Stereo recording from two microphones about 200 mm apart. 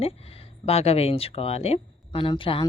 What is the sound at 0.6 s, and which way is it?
Speech, 30° left (ahead or behind).